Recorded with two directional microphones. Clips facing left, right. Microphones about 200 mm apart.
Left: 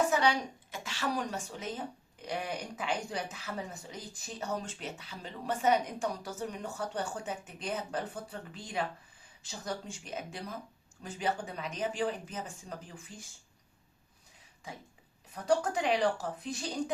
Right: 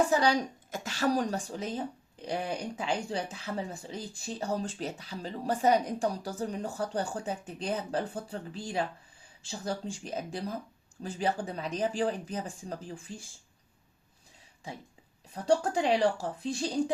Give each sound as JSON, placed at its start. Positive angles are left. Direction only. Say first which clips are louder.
{"t": 0.1, "sound": "a woman's voice", "louder": "right 3 dB", "side_deg": -35}
{"t": 15.4, "sound": "speech", "louder": "right 3 dB", "side_deg": -30}